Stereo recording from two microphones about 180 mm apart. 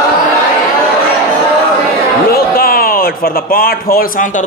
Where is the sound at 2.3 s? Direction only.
55° left (ahead or behind).